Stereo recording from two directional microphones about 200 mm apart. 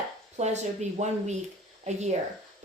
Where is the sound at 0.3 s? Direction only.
35° right (ahead or behind).